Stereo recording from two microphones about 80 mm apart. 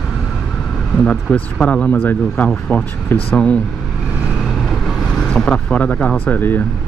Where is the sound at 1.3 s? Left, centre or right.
Centre.